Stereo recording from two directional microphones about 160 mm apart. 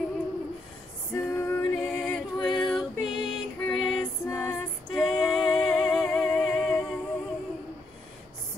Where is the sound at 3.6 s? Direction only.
Centre (ahead or behind).